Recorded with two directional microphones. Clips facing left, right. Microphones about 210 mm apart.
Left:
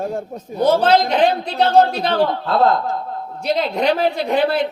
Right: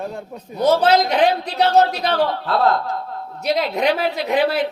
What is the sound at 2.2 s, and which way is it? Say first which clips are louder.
Speech: left 2 dB; 50° left (ahead or behind).